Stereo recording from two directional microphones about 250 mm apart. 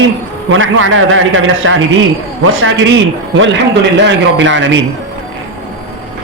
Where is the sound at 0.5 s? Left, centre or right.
Right.